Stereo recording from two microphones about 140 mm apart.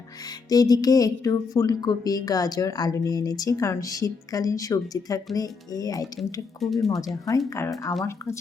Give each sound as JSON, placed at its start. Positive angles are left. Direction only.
{"t": 0.5, "sound": "a woman's voice", "side_deg": 25}
{"t": 6.8, "sound": "speech", "side_deg": 0}
{"t": 7.3, "sound": "a woman's voice", "side_deg": 20}